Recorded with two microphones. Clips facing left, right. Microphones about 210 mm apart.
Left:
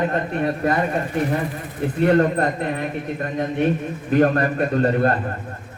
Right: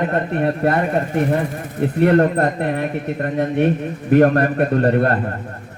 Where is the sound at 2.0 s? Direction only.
55° right (ahead or behind).